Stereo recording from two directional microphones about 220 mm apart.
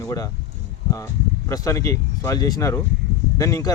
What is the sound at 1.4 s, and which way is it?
Speech, 15° left (ahead or behind).